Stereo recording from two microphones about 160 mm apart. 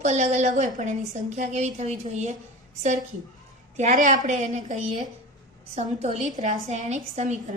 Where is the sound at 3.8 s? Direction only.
55° right (ahead or behind).